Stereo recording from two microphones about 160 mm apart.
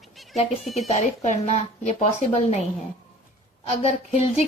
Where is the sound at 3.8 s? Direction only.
40° left (ahead or behind).